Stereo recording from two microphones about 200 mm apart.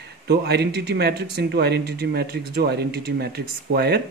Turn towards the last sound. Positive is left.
turn(degrees=-55)  # may be behind; listen again after turning